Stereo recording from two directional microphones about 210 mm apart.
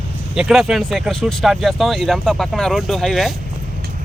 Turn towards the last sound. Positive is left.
turn(degrees=0)  # may be behind; listen again after turning